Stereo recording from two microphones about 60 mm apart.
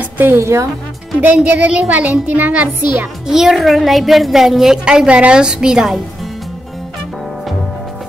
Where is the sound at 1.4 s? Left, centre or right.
Right.